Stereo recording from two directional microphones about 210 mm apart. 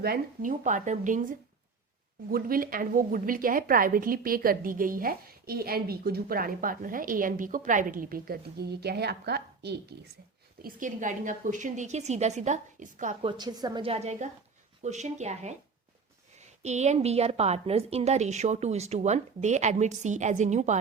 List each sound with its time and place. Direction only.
0.0 s a woman's voice: 45° right (ahead or behind)
10.6 s a woman's voice: 40° right (ahead or behind)
13.2 s a woman's voice: 20° right (ahead or behind)